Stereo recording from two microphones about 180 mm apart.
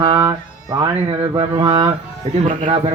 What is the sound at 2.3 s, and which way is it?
Speech, 40° right (ahead or behind).